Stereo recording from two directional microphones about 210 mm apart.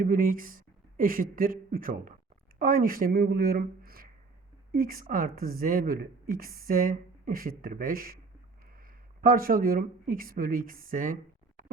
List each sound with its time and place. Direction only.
0.0 s a woman's voice: 40° right (ahead or behind)
9.2 s a woman's voice: 45° right (ahead or behind)